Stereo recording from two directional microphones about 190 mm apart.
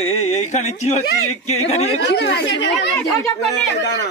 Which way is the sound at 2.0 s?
65° left (ahead or behind).